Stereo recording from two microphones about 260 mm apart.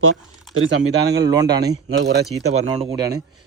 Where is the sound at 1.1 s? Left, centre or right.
Centre.